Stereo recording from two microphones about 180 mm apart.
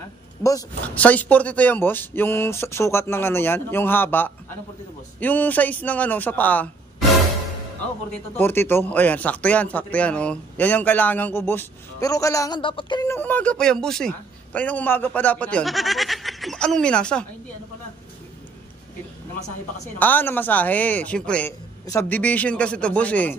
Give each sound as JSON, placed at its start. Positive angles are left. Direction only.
{"t": 0.4, "sound": "speech", "side_deg": 20}
{"t": 0.8, "sound": "speech", "side_deg": 10}
{"t": 8.1, "sound": "speech", "side_deg": 10}
{"t": 13.1, "sound": "a woman's voice", "side_deg": 10}
{"t": 20.0, "sound": "speech", "side_deg": 10}